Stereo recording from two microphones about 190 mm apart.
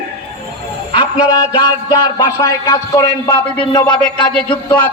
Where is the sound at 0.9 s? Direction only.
25° left (ahead or behind).